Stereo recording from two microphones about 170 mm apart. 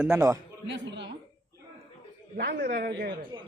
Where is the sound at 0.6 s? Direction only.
90° right.